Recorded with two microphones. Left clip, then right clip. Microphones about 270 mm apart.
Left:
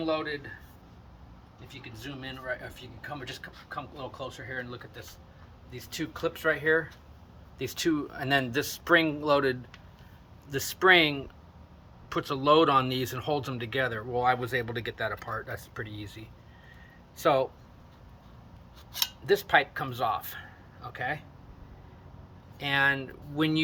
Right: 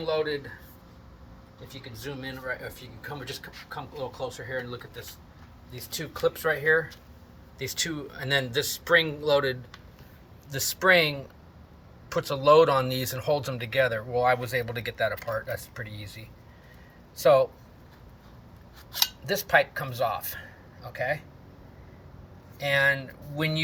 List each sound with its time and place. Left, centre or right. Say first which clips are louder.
0.0 s speech: right 3 dB; centre
1.6 s speech: right 4 dB; centre
17.2 s speech: right 5 dB; centre
19.2 s speech: even; centre
22.5 s speech: right 2 dB; centre